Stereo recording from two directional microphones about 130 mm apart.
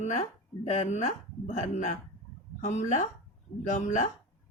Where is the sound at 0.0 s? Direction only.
60° left (ahead or behind).